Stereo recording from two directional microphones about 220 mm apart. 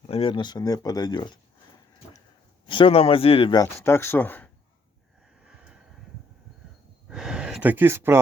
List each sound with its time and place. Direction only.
0.1 s speech: 25° left (ahead or behind)
2.6 s speech: 25° left (ahead or behind)
7.1 s a sound: 5° right (ahead or behind)